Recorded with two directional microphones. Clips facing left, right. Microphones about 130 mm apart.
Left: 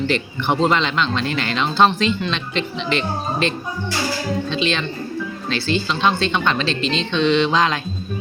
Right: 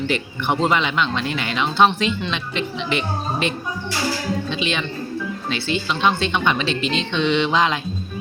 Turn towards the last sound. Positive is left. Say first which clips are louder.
# left 1 dB
turn(degrees=-15)  # may be behind; listen again after turning